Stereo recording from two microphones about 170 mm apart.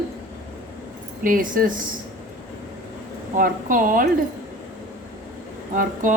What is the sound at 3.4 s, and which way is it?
Speech, 55° right (ahead or behind).